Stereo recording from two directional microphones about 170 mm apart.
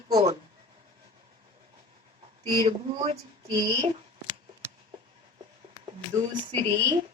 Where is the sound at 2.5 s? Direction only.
35° right (ahead or behind).